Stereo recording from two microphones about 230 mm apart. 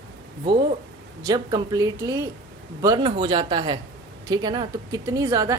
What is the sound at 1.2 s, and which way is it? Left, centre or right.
A woman's voice, centre.